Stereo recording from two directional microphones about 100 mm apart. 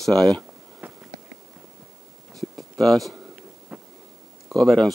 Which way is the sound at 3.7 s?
10° right (ahead or behind).